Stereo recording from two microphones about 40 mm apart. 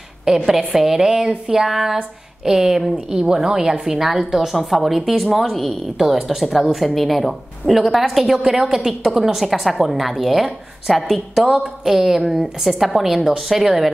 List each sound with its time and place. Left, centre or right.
0.2 s a woman's voice: centre
4.5 s a woman's voice: centre
5.9 s a woman's voice: centre